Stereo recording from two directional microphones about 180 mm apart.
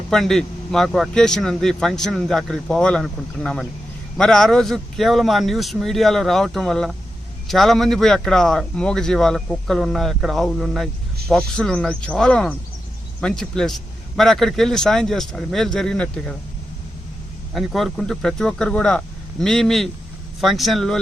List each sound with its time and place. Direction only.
0.1 s speech: 5° left (ahead or behind)
17.5 s speech: centre (ahead or behind)